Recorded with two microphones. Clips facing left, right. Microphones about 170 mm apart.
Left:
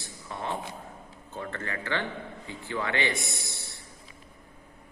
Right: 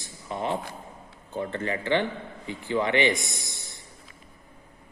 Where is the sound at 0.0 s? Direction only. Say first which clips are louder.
Right 5 dB; 20° right (ahead or behind).